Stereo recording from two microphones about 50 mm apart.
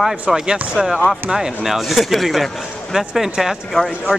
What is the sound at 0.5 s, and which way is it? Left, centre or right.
Speech, centre.